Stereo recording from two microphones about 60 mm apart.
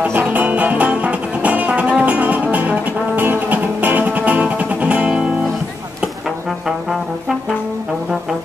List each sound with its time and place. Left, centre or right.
0.0 s music: right